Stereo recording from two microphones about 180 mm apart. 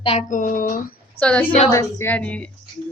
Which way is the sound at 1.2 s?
10° left (ahead or behind).